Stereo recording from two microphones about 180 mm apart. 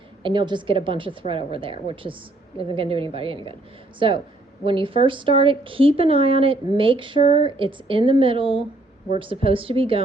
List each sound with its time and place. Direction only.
0.2 s a woman's voice: 25° right (ahead or behind)